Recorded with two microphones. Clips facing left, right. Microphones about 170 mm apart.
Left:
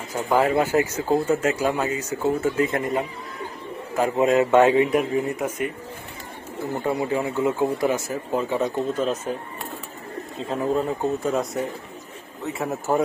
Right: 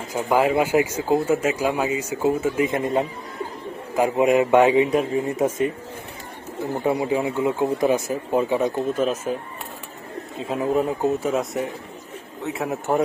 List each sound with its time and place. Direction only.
0.1 s a man's voice: 10° right (ahead or behind)
10.3 s a man's voice: 10° right (ahead or behind)